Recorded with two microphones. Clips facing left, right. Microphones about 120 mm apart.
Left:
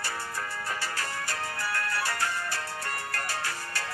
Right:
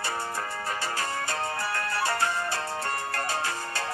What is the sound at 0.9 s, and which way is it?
Music, 25° right (ahead or behind).